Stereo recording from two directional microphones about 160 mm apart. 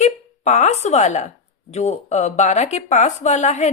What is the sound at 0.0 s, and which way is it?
Speech, 45° left (ahead or behind).